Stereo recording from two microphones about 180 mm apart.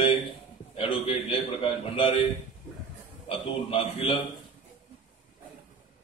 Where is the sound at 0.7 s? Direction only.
30° left (ahead or behind).